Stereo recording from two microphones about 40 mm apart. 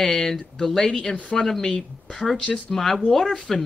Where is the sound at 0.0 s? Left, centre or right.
Centre.